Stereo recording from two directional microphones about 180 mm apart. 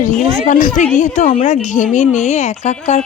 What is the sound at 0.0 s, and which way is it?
A woman's voice, 45° left (ahead or behind).